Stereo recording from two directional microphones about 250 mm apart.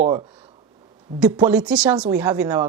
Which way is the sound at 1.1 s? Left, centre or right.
Centre.